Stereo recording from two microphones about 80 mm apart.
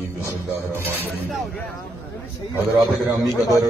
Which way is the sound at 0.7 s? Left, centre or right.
Right.